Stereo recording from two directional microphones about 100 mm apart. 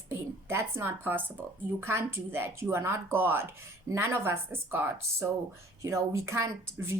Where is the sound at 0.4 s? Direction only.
25° right (ahead or behind).